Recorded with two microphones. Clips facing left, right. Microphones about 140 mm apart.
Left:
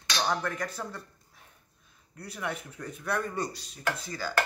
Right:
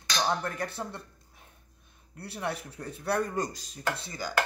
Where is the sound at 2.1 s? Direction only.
30° right (ahead or behind).